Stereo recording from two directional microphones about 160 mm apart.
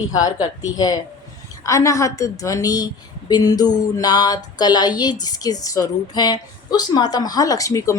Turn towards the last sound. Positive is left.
turn(degrees=20)  # may be behind; listen again after turning